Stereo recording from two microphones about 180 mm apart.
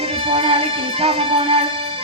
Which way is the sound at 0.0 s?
30° right (ahead or behind).